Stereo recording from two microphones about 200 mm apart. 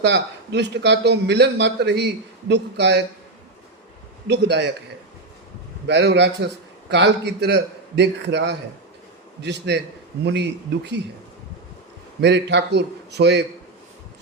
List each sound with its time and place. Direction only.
0.0 s a man's voice: 60° right (ahead or behind)
4.3 s a man's voice: 60° right (ahead or behind)
5.8 s a man's voice: 60° right (ahead or behind)
12.2 s a man's voice: 60° right (ahead or behind)